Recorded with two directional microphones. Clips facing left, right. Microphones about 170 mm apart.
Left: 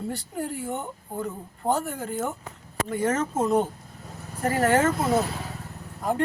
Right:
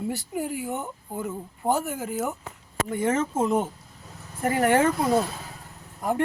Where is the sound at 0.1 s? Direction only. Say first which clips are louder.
Right 2 dB; 5° right (ahead or behind).